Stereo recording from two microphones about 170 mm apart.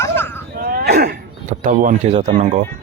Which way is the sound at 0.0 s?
15° left (ahead or behind).